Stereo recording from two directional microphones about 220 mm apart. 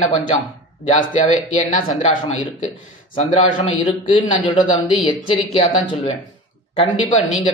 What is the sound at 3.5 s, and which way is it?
A man's voice, 30° left (ahead or behind).